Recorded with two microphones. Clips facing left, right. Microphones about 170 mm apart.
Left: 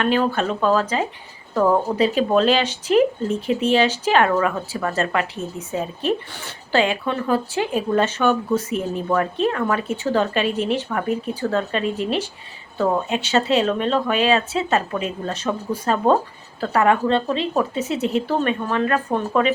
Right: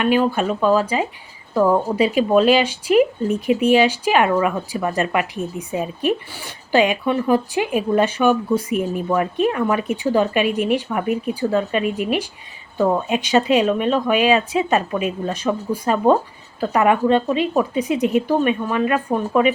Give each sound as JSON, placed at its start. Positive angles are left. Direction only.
{"t": 0.0, "sound": "speech", "side_deg": -10}